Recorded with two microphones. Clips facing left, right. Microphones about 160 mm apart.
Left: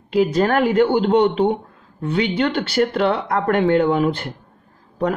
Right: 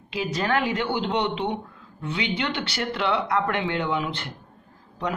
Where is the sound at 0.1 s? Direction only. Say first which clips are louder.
Left 8 dB; 50° left (ahead or behind).